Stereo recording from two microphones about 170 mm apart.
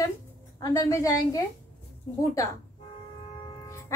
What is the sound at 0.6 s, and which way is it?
Speech, 20° left (ahead or behind).